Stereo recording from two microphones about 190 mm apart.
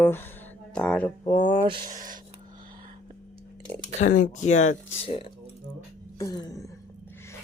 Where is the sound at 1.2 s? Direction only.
25° left (ahead or behind).